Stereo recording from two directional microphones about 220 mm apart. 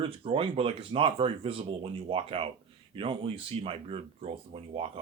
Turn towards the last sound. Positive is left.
turn(degrees=-25)  # may be behind; listen again after turning